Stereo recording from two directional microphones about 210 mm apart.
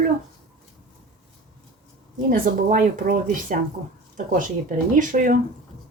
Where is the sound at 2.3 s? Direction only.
40° right (ahead or behind).